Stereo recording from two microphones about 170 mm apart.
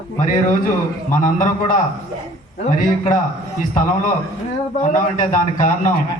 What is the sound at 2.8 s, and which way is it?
A man's voice, 50° left (ahead or behind).